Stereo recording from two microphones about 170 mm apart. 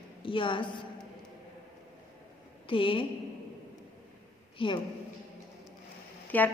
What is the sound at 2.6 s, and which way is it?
Speech, 30° left (ahead or behind).